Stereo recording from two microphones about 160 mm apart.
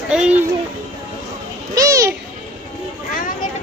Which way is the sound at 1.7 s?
20° right (ahead or behind).